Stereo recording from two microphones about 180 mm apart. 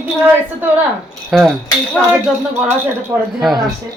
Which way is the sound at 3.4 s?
Centre (ahead or behind).